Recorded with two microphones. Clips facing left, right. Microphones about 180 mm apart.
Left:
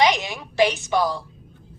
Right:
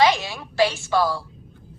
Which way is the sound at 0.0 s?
20° left (ahead or behind).